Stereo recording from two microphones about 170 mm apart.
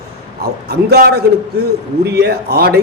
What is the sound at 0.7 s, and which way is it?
A man's voice, 70° right (ahead or behind).